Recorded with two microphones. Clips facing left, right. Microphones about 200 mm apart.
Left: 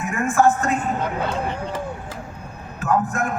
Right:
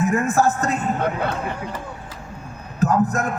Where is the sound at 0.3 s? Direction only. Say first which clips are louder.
Left 2 dB; 35° right (ahead or behind).